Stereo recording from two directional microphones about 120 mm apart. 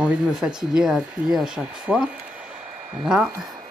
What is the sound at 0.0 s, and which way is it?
Speech, 10° right (ahead or behind).